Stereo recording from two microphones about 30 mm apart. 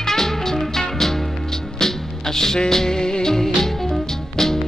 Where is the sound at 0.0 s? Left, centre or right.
Centre.